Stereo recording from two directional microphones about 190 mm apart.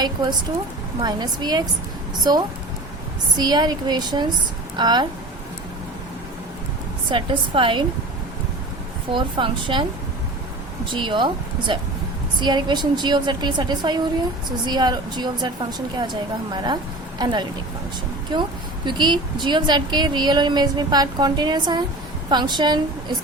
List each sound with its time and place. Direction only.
0.0 s a woman's voice: 20° right (ahead or behind)
7.1 s a woman's voice: 25° right (ahead or behind)
9.1 s a woman's voice: 25° right (ahead or behind)
10.9 s a woman's voice: 25° right (ahead or behind)
12.4 s a woman's voice: 25° right (ahead or behind)